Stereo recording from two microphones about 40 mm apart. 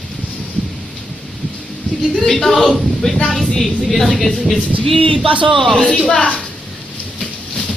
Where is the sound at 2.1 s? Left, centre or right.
Centre.